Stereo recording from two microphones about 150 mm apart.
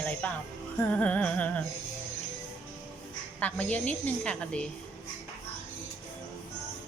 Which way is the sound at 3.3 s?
10° left (ahead or behind).